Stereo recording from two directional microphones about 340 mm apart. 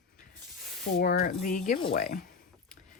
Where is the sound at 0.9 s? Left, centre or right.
Left.